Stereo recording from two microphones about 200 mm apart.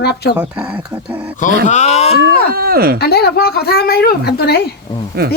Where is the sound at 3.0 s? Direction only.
50° left (ahead or behind).